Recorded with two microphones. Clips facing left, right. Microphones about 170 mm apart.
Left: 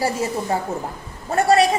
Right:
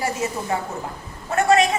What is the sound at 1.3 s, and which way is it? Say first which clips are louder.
Speech: left 1 dB; 35° left (ahead or behind).